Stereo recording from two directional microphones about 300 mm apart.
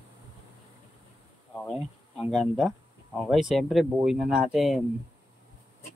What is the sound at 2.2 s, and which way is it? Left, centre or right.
Speech, centre.